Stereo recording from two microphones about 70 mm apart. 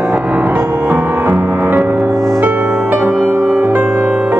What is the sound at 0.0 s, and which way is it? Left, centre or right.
Music, right.